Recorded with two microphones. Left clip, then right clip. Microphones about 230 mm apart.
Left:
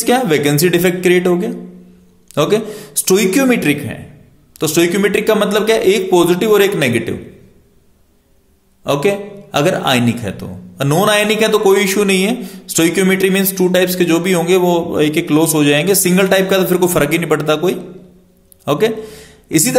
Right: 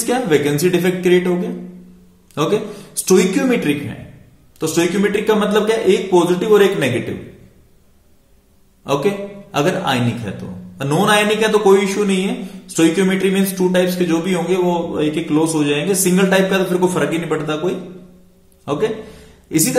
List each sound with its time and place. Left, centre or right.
0.0 s a man's voice: left
8.8 s a man's voice: left